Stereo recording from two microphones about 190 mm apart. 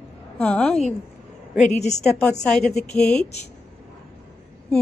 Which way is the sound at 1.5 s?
40° left (ahead or behind).